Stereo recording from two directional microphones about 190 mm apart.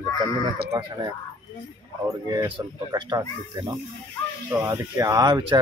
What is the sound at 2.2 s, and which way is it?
Speech, 25° right (ahead or behind).